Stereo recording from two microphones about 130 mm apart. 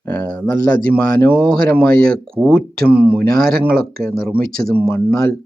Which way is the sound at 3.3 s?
5° left (ahead or behind).